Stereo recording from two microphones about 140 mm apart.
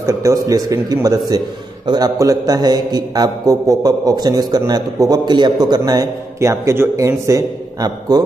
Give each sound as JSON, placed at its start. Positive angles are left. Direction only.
{"t": 0.0, "sound": "a man's voice", "side_deg": -20}